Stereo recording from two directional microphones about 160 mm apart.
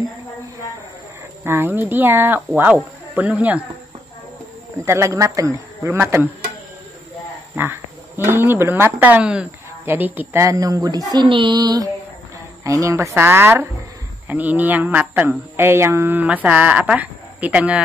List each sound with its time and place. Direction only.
1.4 s speech: 15° right (ahead or behind)
4.8 s speech: 20° right (ahead or behind)
7.5 s speech: 15° right (ahead or behind)